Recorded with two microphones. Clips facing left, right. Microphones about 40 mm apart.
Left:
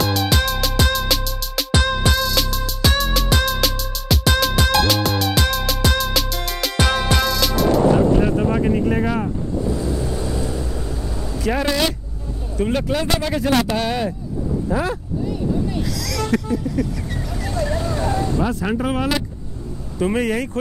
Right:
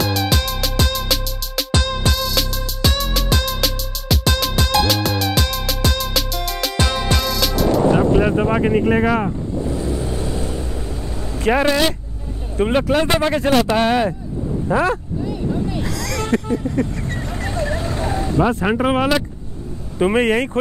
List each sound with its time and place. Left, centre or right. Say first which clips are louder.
0.0 s music: even; centre
8.2 s vehicle: right 2 dB; right
11.3 s speech: right 4 dB; right
15.8 s vehicle: right 1 dB; right
17.6 s vehicle: even; centre
18.5 s speech: right 4 dB; right